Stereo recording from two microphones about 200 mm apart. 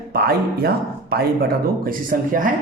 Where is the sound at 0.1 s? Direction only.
50° right (ahead or behind).